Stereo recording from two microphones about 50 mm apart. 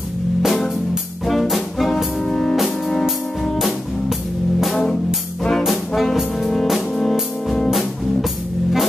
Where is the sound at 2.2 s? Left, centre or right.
Centre.